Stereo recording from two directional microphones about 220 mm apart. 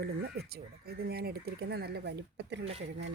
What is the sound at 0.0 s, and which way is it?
Speech, 45° right (ahead or behind).